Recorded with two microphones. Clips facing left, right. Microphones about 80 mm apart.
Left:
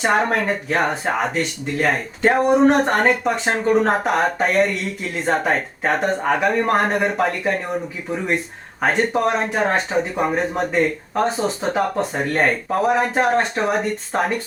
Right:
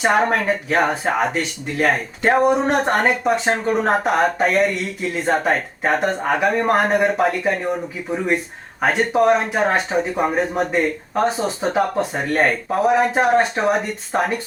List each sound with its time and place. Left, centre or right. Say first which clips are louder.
0.0 s speech: right 1 dB; centre
8.8 s speech: right 2 dB; centre